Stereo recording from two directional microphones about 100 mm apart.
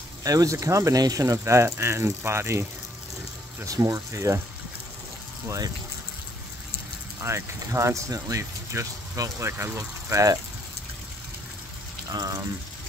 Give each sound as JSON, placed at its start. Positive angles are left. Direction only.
{"t": 0.2, "sound": "speech", "side_deg": -35}
{"t": 3.6, "sound": "speech", "side_deg": -35}
{"t": 7.2, "sound": "speech", "side_deg": -25}
{"t": 12.1, "sound": "speech", "side_deg": -40}